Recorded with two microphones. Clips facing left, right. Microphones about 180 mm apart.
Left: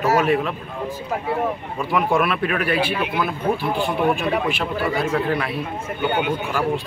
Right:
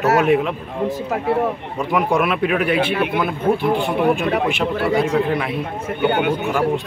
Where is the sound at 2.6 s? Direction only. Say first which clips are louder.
Right 3 dB; 20° right (ahead or behind).